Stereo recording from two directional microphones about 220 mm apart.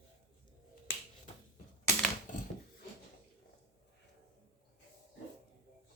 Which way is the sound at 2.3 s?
35° left (ahead or behind).